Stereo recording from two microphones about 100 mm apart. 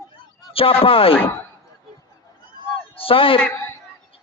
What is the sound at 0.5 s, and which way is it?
Speech, 70° left (ahead or behind).